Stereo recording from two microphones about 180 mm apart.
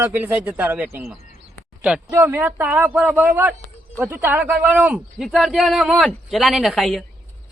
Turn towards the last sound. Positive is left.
turn(degrees=0)  # may be behind; listen again after turning